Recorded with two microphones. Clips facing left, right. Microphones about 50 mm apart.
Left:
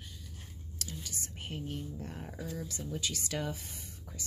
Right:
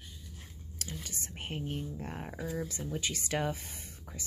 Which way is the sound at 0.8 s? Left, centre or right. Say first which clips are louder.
Right 1 dB; right.